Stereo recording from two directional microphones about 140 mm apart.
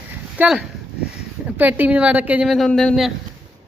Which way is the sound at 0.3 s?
5° right (ahead or behind).